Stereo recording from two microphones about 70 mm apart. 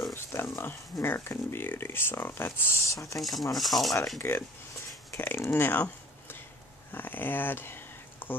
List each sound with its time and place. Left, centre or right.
0.1 s a sound: left
1.0 s speech: left
2.8 s speech: left
3.2 s speech: centre
4.2 s speech: left
6.9 s a sound: left